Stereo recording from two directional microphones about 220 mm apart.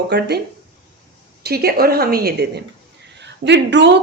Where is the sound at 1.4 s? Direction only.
45° right (ahead or behind).